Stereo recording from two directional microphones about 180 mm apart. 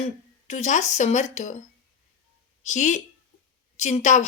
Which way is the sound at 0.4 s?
40° left (ahead or behind).